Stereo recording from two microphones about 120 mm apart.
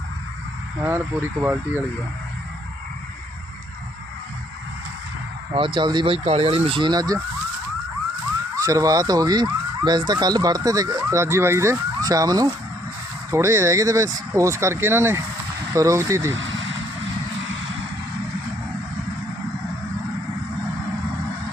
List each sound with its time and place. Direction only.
0.8 s speech: 20° right (ahead or behind)
5.5 s speech: 45° right (ahead or behind)
6.2 s speech: 55° right (ahead or behind); by 7.2 s 35° right (ahead or behind)
8.5 s speech: 30° right (ahead or behind)